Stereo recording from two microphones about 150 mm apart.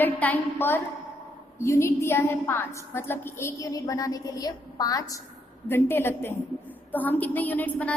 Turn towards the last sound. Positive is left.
turn(degrees=10)  # may be behind; listen again after turning